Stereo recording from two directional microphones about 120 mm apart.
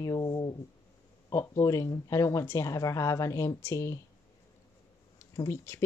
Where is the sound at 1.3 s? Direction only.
25° left (ahead or behind).